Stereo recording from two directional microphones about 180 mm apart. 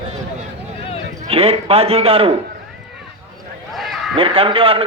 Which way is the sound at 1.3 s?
35° right (ahead or behind).